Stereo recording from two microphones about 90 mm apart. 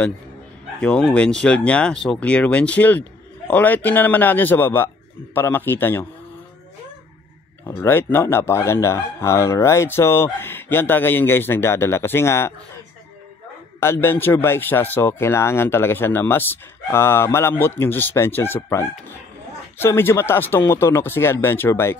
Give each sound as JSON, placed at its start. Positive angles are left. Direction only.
{"t": 0.7, "sound": "speech", "side_deg": 15}
{"t": 7.6, "sound": "speech", "side_deg": 25}
{"t": 13.7, "sound": "speech", "side_deg": 30}